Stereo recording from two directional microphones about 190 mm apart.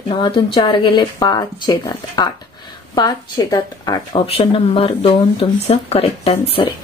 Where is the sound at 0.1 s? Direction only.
25° left (ahead or behind).